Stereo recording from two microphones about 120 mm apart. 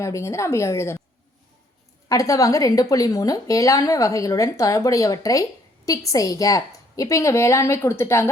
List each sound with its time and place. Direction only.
0.0 s a woman's voice: 25° left (ahead or behind)
2.0 s a woman's voice: 30° left (ahead or behind)